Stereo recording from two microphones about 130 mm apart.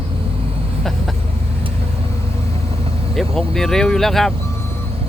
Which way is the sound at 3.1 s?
5° left (ahead or behind).